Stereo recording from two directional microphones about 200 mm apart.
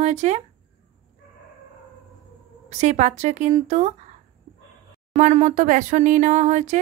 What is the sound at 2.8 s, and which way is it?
Speech, 35° right (ahead or behind).